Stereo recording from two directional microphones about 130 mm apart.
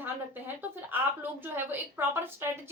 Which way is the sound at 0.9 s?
15° right (ahead or behind).